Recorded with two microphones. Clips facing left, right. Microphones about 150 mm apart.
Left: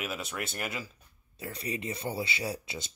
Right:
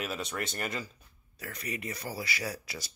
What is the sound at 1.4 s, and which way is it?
Speech, 30° left (ahead or behind).